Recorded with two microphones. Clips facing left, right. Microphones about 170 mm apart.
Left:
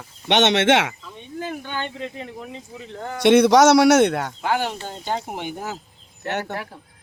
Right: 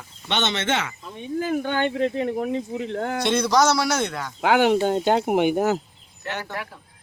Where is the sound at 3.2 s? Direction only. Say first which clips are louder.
Left 8 dB; 70° left (ahead or behind).